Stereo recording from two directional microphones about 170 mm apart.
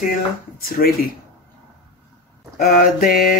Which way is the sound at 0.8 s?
50° left (ahead or behind).